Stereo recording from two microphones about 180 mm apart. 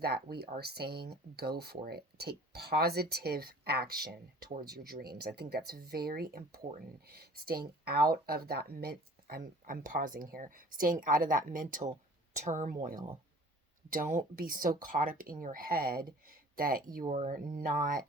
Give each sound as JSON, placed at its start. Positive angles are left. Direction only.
{"t": 0.0, "sound": "speech", "side_deg": -60}